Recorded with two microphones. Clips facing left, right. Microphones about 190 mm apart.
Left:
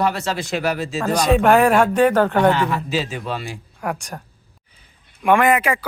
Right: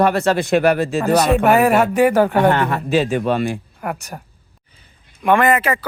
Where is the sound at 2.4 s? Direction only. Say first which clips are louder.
Right 1 dB; 55° right (ahead or behind).